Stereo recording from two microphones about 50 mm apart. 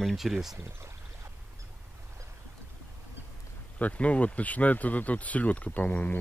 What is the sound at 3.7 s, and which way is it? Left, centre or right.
Speech, left.